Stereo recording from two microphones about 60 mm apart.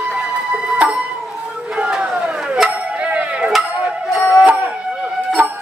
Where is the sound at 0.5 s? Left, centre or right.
Right.